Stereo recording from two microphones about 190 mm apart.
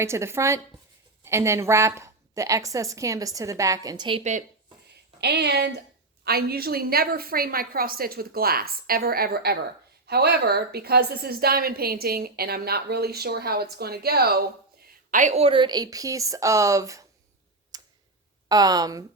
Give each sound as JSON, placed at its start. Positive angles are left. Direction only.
{"t": 0.0, "sound": "a woman's voice", "side_deg": -15}
{"t": 4.2, "sound": "speech", "side_deg": -40}
{"t": 5.2, "sound": "a woman's voice", "side_deg": -60}
{"t": 17.7, "sound": "tick", "side_deg": -20}
{"t": 18.4, "sound": "speech", "side_deg": -20}